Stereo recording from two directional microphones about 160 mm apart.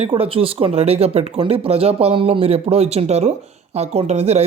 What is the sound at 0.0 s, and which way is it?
Speech, 35° right (ahead or behind).